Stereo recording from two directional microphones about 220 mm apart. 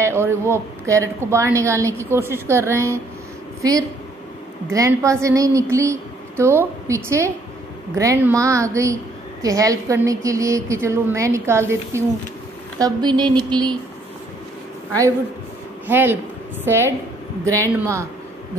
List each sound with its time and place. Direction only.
0.0 s a woman's voice: 10° right (ahead or behind)
12.7 s a sound: 20° right (ahead or behind)
15.9 s a woman's voice: 10° right (ahead or behind)